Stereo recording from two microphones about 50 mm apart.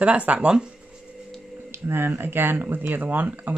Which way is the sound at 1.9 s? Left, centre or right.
Right.